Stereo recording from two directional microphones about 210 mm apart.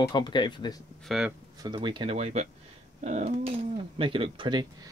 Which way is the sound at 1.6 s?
20° right (ahead or behind).